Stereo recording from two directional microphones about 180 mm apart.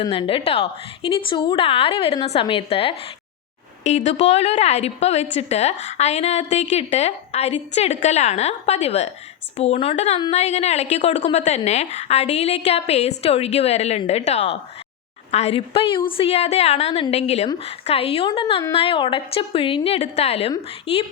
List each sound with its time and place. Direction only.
0.0 s a woman's voice: 30° left (ahead or behind)